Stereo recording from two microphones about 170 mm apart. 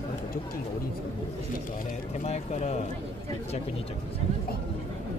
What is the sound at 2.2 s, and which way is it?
Speech, 45° left (ahead or behind).